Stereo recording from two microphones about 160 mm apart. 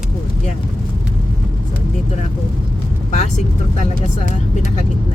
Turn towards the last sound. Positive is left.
turn(degrees=45)  # may be behind; listen again after turning